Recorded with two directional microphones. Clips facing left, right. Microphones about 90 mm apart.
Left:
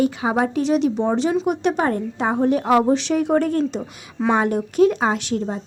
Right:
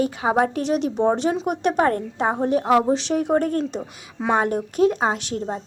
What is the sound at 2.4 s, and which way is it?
A woman's voice, 35° right (ahead or behind).